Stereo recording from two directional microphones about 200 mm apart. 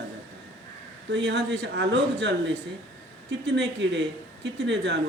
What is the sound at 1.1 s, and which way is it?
Speech, 60° right (ahead or behind).